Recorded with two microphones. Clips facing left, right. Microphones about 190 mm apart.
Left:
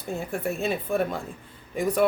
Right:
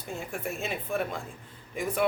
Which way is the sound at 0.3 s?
35° left (ahead or behind).